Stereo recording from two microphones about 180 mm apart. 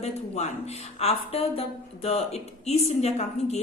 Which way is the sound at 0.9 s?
35° left (ahead or behind).